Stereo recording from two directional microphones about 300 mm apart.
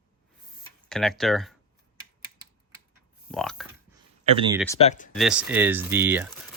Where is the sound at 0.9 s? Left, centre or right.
Centre.